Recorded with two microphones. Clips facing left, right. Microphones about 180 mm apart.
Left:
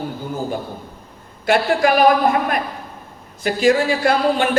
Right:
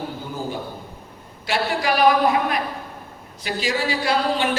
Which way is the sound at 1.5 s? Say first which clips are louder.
Left 6 dB; 50° left (ahead or behind).